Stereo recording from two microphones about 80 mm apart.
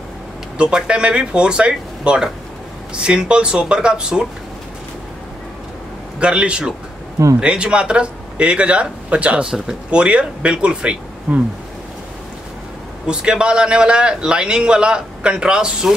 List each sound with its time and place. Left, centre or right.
0.6 s speech: centre
6.1 s speech: centre
13.0 s speech: centre